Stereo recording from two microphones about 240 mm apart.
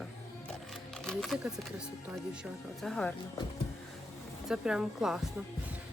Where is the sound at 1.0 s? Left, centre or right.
Centre.